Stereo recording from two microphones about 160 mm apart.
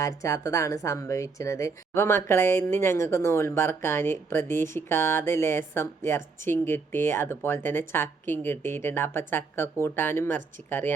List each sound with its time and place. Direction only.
0.0 s speech: 20° left (ahead or behind)